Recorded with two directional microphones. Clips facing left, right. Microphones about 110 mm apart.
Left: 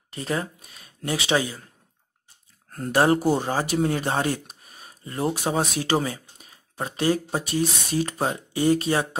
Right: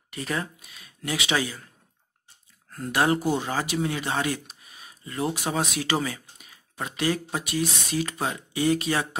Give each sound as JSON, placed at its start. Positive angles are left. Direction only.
{"t": 0.1, "sound": "speech", "side_deg": 30}
{"t": 2.7, "sound": "speech", "side_deg": 40}